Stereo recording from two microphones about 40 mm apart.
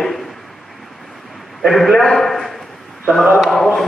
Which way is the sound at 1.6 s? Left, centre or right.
Centre.